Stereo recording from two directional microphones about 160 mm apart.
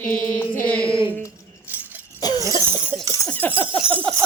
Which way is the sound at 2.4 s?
20° right (ahead or behind).